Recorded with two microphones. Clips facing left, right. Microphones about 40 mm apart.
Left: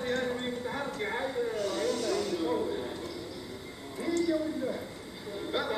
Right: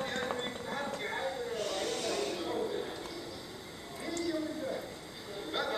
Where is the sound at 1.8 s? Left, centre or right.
Right.